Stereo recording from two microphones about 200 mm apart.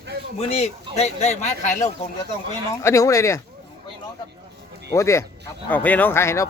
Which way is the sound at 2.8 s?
15° left (ahead or behind).